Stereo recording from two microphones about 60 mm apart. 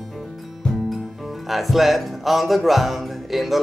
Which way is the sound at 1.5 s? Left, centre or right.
Centre.